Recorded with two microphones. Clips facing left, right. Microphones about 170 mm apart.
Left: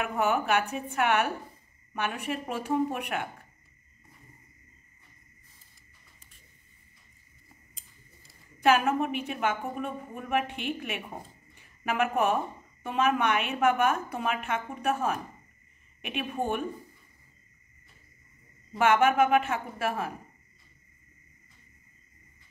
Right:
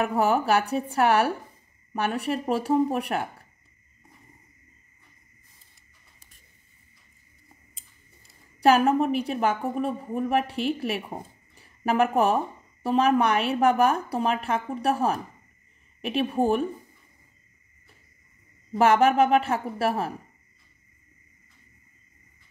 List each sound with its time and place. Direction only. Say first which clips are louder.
0.0 s a woman's voice: right 5 dB; 35° right (ahead or behind)
8.5 s a woman's voice: right 4 dB; 35° right (ahead or behind)
11.5 s a sound: right 6 dB; 35° right (ahead or behind)
12.8 s a woman's voice: right 5 dB; 35° right (ahead or behind)
18.8 s a woman's voice: right 3 dB; 35° right (ahead or behind)